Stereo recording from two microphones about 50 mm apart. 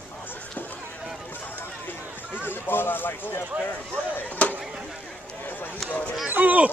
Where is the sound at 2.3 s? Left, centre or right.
Left.